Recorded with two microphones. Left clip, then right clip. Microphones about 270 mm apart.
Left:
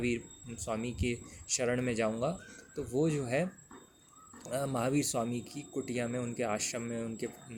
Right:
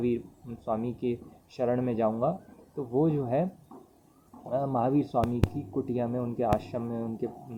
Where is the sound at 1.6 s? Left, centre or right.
Left.